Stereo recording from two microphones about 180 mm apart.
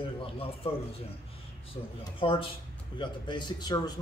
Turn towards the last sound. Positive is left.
turn(degrees=25)  # may be behind; listen again after turning